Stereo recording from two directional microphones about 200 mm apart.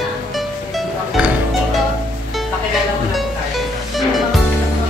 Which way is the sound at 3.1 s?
Centre (ahead or behind).